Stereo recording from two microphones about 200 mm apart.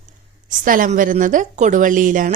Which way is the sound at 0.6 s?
45° right (ahead or behind).